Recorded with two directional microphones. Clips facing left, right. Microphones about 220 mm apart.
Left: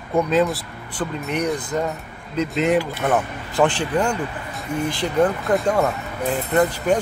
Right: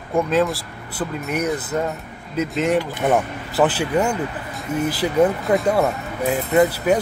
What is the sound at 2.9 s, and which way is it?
Speech, 15° right (ahead or behind).